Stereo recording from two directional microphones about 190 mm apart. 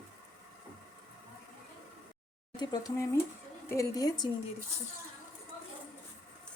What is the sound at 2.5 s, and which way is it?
Speech, 20° left (ahead or behind).